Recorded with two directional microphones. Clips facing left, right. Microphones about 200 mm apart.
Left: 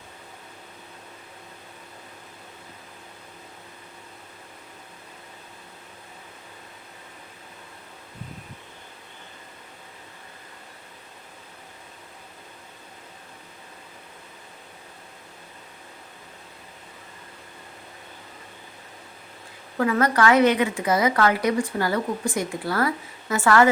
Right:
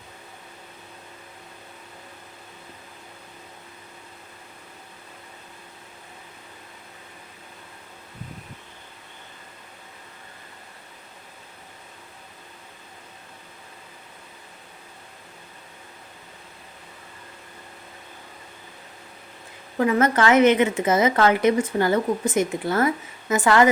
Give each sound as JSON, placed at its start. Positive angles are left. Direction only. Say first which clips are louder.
{"t": 19.7, "sound": "a woman's voice", "louder": "right 2 dB", "side_deg": -20}